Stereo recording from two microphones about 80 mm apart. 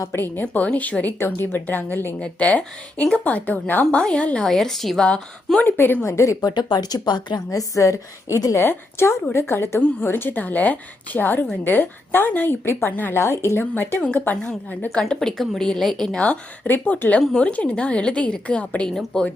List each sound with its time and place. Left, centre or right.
0.4 s speech: centre
2.1 s a woman's voice: centre
5.0 s a woman's voice: centre
5.6 s speech: left
6.4 s a woman's voice: left
7.8 s a woman's voice: left
8.5 s a woman's voice: left
14.9 s a woman's voice: centre
16.2 s a woman's voice: left